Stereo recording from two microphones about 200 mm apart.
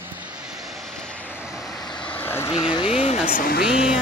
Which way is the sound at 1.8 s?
20° left (ahead or behind).